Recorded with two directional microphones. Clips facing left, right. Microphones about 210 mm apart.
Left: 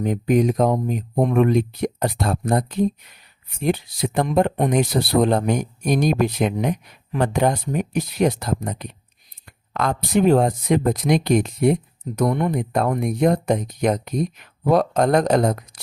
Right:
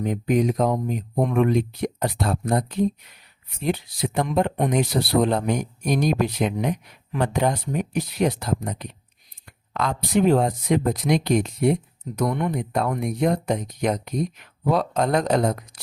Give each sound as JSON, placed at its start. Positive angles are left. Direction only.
{"t": 0.1, "sound": "speech", "side_deg": 45}